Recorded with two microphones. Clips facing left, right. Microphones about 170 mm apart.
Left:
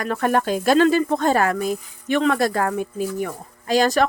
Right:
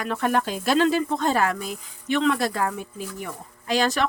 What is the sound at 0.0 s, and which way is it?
Speech, 45° left (ahead or behind).